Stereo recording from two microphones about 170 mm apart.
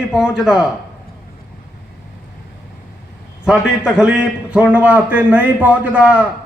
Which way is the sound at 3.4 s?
5° right (ahead or behind).